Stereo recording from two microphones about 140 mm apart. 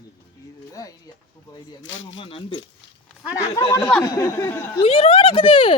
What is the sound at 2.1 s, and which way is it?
Speech, 40° left (ahead or behind).